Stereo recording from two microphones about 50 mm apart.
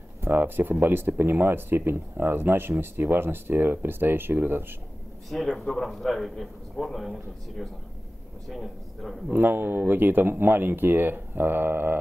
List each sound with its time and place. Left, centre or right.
0.2 s speech: right
5.6 s a man's voice: centre
9.3 s speech: right